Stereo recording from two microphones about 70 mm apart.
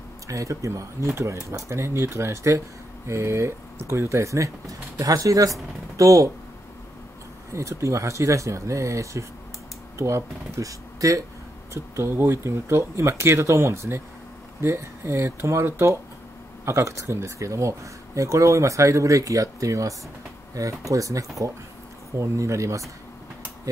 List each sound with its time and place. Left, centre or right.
0.3 s speech: right
7.5 s speech: right
11.7 s speech: right